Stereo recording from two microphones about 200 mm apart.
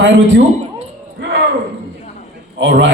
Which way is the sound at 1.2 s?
65° right (ahead or behind).